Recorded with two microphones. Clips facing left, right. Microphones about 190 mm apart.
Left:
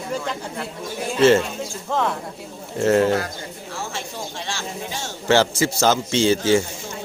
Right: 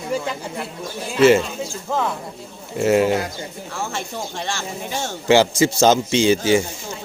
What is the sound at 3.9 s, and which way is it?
Speech, 55° right (ahead or behind).